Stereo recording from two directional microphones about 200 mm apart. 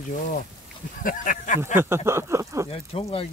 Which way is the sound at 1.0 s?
40° left (ahead or behind).